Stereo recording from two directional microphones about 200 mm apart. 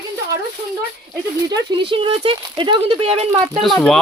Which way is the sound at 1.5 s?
20° right (ahead or behind).